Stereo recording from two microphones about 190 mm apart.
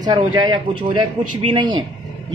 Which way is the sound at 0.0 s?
20° right (ahead or behind).